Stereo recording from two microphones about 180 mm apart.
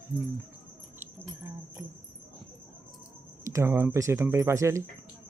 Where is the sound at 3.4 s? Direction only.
15° right (ahead or behind).